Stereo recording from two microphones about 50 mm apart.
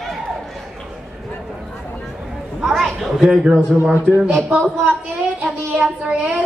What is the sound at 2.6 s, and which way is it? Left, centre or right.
Chatter, centre.